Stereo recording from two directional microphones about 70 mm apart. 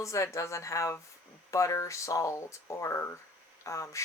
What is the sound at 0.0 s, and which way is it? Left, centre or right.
Speech, left.